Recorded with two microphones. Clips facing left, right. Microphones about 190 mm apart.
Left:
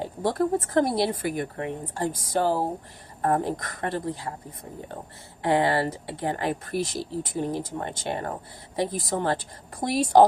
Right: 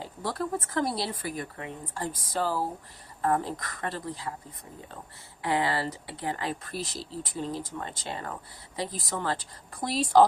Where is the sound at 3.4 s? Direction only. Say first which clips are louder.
Left 5 dB; 20° left (ahead or behind).